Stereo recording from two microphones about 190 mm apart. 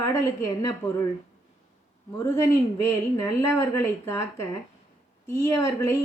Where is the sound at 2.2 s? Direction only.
15° left (ahead or behind).